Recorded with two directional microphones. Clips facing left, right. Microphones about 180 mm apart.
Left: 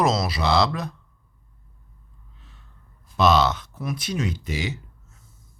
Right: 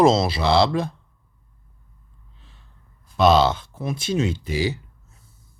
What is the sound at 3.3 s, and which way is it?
Speech, 30° right (ahead or behind).